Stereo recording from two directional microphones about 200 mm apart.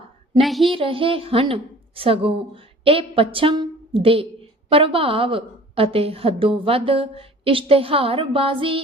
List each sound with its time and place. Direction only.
0.4 s speech: centre (ahead or behind)
0.7 s a woman's voice: 25° right (ahead or behind)